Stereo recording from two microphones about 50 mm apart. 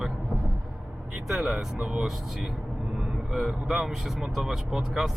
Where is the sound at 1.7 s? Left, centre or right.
Right.